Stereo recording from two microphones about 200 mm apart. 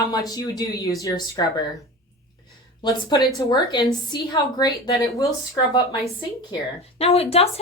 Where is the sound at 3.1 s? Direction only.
20° left (ahead or behind).